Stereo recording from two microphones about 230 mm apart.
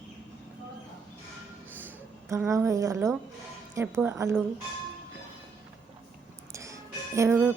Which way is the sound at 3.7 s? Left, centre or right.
Centre.